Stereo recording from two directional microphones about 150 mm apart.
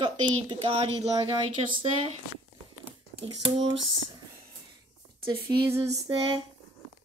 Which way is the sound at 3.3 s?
35° right (ahead or behind).